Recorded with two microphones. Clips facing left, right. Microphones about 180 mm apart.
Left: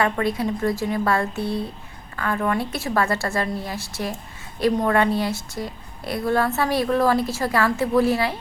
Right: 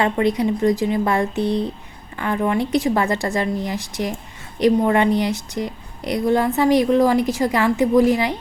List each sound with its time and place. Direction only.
0.0 s a woman's voice: 20° right (ahead or behind)